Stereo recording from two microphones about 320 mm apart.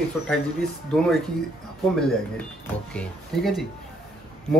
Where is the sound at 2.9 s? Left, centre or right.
Centre.